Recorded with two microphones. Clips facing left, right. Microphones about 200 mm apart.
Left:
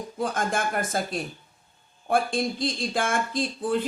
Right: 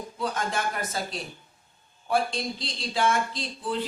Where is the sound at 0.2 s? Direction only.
50° left (ahead or behind).